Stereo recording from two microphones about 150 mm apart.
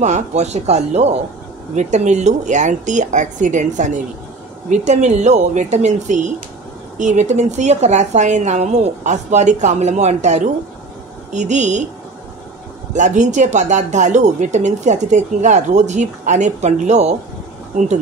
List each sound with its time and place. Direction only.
0.0 s speech: 50° right (ahead or behind)
12.9 s speech: 55° right (ahead or behind)